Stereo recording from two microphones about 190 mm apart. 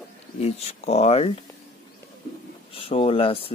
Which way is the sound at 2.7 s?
30° left (ahead or behind).